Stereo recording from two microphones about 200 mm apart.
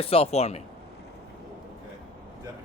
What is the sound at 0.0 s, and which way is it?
Speech, 30° left (ahead or behind).